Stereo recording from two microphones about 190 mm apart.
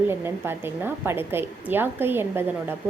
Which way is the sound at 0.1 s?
10° right (ahead or behind).